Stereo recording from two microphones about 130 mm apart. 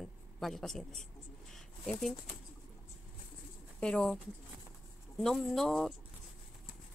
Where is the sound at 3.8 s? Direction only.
5° left (ahead or behind).